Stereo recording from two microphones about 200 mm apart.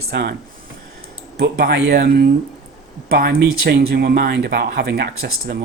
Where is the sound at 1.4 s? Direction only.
50° right (ahead or behind).